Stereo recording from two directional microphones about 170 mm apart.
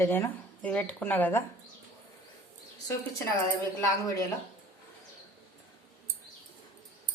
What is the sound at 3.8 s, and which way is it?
Speech, 20° left (ahead or behind).